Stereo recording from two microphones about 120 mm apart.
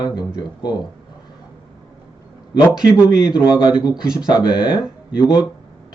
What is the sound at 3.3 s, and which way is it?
A man's voice, 40° left (ahead or behind).